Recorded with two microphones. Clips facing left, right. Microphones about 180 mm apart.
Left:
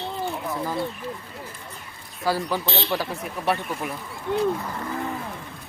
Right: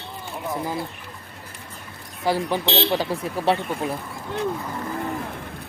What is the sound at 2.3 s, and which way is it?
Speech, 20° right (ahead or behind).